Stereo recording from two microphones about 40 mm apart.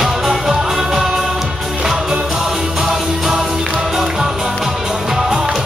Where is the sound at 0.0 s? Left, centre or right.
Centre.